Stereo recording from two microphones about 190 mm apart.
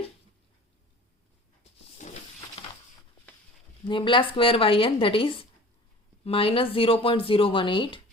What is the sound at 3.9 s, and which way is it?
Speech, 25° left (ahead or behind).